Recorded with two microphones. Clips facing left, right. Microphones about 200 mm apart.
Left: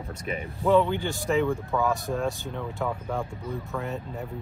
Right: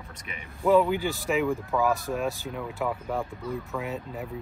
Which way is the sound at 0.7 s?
5° right (ahead or behind).